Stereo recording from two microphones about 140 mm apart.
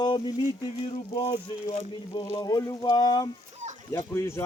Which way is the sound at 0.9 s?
35° left (ahead or behind).